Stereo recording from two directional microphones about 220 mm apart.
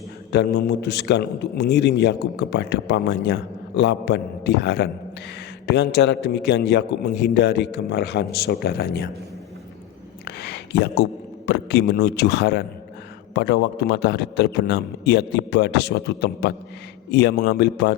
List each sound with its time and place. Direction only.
0.3 s a man's voice: 45° left (ahead or behind)
10.2 s a man's voice: 50° left (ahead or behind)